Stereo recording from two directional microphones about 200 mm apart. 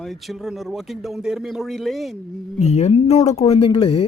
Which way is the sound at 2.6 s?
35° left (ahead or behind).